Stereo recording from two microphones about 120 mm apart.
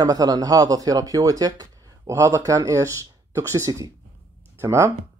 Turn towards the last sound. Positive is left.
turn(degrees=-25)  # may be behind; listen again after turning